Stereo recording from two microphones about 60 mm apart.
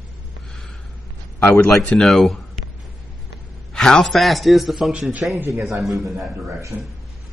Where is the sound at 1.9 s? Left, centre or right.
Centre.